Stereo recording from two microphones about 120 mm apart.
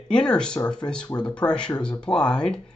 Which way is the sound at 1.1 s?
35° left (ahead or behind).